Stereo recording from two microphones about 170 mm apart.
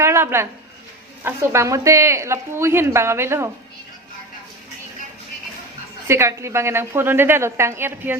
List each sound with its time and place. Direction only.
0.0 s a sound: 15° right (ahead or behind)
1.2 s speech: 15° right (ahead or behind)
6.1 s speech: 15° right (ahead or behind)